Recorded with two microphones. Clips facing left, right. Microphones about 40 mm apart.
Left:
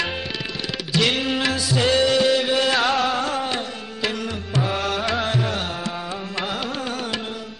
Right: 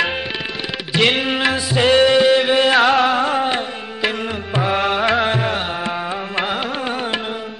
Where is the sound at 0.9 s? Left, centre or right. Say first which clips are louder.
Right 4 dB; right.